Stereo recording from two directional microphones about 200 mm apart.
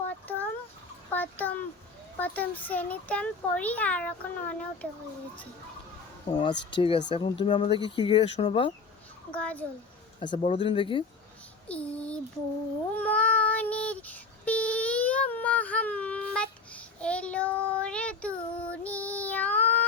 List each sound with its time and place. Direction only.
1.1 s a sound: 10° left (ahead or behind)
2.1 s a child's voice: 10° left (ahead or behind)
6.3 s speech: 25° left (ahead or behind)
9.3 s a child's voice: 5° left (ahead or behind)
10.2 s speech: 30° left (ahead or behind)
11.7 s a sound: 5° left (ahead or behind)
13.0 s child singing: 10° left (ahead or behind)